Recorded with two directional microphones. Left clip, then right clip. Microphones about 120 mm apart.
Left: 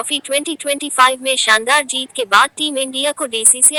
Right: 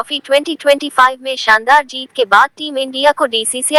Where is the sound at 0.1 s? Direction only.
15° left (ahead or behind).